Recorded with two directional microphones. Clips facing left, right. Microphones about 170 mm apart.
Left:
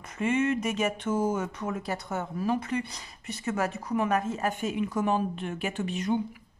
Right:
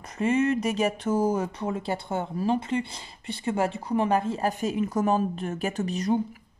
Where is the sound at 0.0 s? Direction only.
35° right (ahead or behind).